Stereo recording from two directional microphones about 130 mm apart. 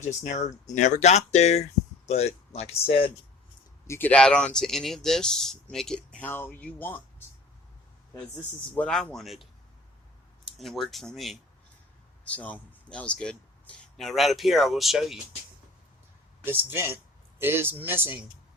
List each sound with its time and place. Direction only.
0.0 s speech: 65° left (ahead or behind); by 3.1 s 50° left (ahead or behind)
3.8 s speech: 15° left (ahead or behind)
4.1 s speech: 5° left (ahead or behind)
8.7 s speech: 5° left (ahead or behind)
10.6 s speech: centre (ahead or behind)
12.2 s speech: 10° left (ahead or behind)
16.4 s speech: 15° right (ahead or behind)